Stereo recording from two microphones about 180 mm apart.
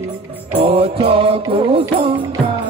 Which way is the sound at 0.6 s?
30° right (ahead or behind).